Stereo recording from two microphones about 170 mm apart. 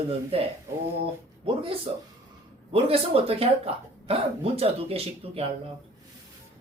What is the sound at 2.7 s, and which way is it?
Speech, 35° right (ahead or behind).